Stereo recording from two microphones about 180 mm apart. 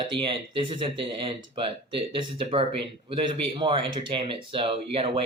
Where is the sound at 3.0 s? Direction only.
25° right (ahead or behind).